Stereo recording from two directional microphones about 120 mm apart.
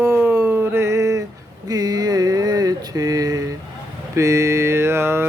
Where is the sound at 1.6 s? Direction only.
35° right (ahead or behind).